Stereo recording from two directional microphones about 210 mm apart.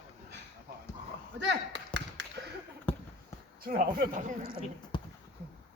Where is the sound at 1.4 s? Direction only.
60° right (ahead or behind).